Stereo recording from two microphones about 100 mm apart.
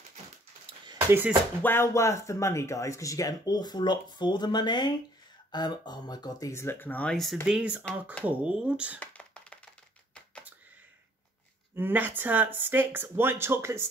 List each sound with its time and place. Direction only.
0.9 s a sound: 20° right (ahead or behind)
1.6 s speech: 25° left (ahead or behind); by 6.5 s 40° left (ahead or behind)
6.5 s speech: 25° left (ahead or behind)
7.4 s speech: 10° right (ahead or behind)
7.8 s speech: 15° left (ahead or behind)
8.3 s speech: 10° right (ahead or behind)
9.0 s a sound: 15° left (ahead or behind)
11.7 s speech: 20° right (ahead or behind)